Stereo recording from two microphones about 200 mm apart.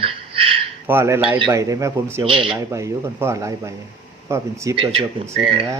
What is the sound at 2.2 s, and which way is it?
Speech, 25° right (ahead or behind).